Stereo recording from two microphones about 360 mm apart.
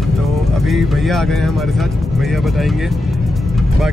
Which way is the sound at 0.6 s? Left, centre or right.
Centre.